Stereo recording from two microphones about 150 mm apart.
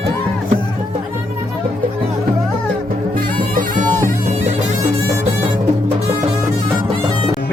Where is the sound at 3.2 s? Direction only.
65° right (ahead or behind).